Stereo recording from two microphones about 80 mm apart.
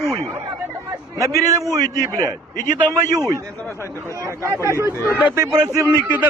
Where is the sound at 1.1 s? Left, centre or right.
Right.